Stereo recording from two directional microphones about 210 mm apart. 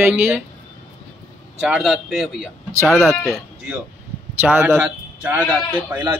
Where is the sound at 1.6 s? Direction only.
Centre (ahead or behind).